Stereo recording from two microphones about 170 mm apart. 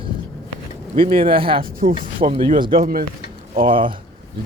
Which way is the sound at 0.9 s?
30° right (ahead or behind).